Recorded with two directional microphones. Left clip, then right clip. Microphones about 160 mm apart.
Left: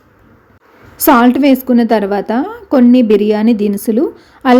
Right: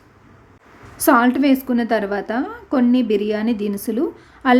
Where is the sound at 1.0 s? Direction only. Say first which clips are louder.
Left 6 dB; 25° left (ahead or behind).